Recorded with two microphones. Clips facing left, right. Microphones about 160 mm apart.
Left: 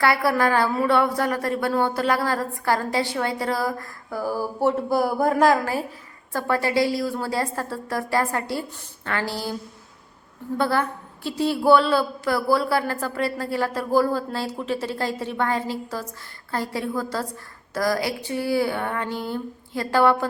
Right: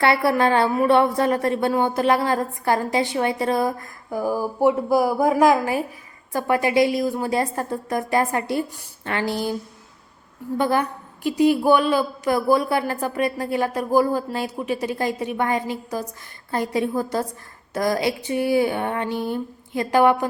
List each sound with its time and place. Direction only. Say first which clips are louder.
0.0 s a woman's voice: right 2 dB; 25° right (ahead or behind)
10.6 s a woman's voice: right 2 dB; 15° right (ahead or behind)